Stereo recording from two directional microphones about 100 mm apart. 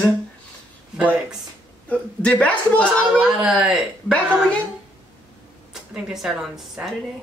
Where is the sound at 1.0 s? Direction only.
15° right (ahead or behind).